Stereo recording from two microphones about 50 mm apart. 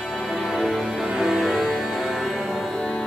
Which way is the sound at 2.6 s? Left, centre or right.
Centre.